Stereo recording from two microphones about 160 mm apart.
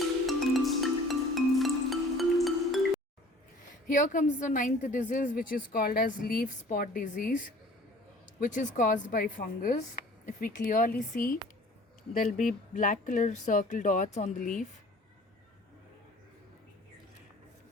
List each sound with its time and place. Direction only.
0.3 s music: centre (ahead or behind)
3.8 s a woman's voice: 55° left (ahead or behind)
12.7 s speech: 55° left (ahead or behind)